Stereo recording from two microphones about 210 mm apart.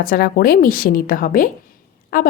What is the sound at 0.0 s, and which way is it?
A woman's voice, 45° left (ahead or behind).